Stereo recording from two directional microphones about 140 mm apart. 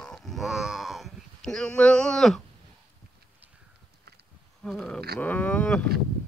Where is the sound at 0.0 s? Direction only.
Centre (ahead or behind).